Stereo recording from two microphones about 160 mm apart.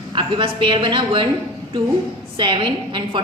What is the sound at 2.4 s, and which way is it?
Speech, 30° right (ahead or behind).